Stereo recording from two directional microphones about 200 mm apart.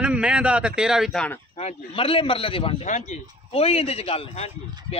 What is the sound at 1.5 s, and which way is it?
A man's voice, 30° left (ahead or behind).